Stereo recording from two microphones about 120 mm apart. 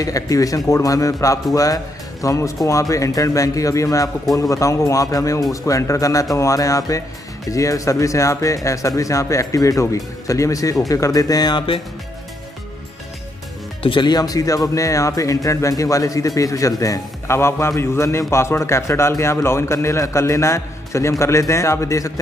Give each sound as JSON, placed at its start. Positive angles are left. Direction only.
{"t": 0.0, "sound": "speech", "side_deg": 30}
{"t": 13.8, "sound": "speech", "side_deg": 40}